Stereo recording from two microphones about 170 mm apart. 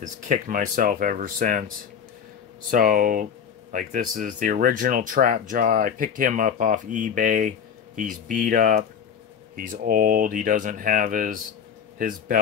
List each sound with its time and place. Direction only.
0.0 s speech: 50° right (ahead or behind)
2.7 s speech: 55° right (ahead or behind)